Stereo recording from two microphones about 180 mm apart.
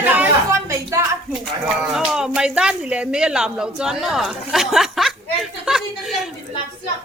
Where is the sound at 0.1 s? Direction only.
10° right (ahead or behind).